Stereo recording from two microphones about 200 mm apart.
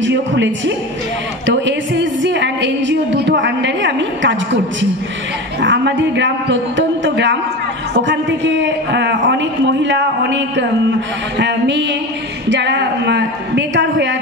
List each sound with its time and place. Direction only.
0.0 s a man's voice: 65° right (ahead or behind)
1.5 s a sound: 65° right (ahead or behind)
5.6 s a man's voice: 65° right (ahead or behind)